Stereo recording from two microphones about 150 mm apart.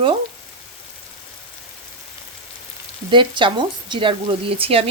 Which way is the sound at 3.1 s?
35° right (ahead or behind).